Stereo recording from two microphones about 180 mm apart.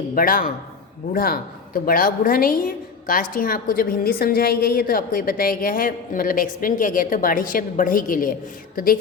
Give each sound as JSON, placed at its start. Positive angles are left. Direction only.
{"t": 0.1, "sound": "a woman's voice", "side_deg": 50}